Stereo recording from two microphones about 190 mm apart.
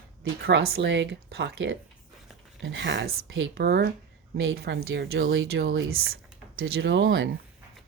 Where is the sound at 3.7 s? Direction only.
55° right (ahead or behind).